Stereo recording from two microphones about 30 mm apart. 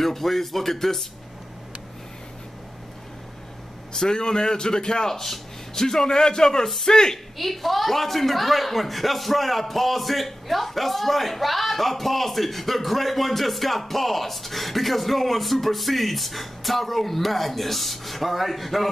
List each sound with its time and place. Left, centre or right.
0.0 s a man's voice: centre
3.9 s a man's voice: left
5.0 s a man's voice: centre
7.3 s speech: centre